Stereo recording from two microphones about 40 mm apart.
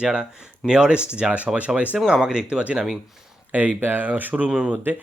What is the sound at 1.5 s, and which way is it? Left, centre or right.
Speech, right.